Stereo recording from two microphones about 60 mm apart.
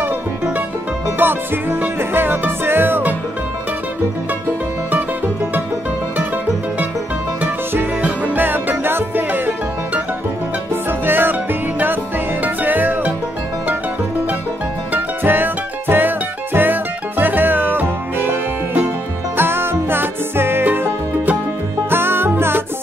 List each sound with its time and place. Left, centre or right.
1.1 s music: right
4.9 s music: right
8.0 s music: right
14.9 s music: right